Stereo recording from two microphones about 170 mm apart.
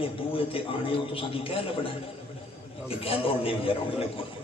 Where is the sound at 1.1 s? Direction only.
30° left (ahead or behind).